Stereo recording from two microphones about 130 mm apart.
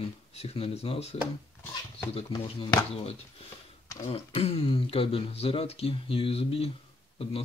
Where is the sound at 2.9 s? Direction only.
50° left (ahead or behind).